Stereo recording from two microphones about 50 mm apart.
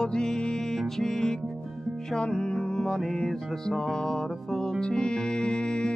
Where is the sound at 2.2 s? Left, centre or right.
Centre.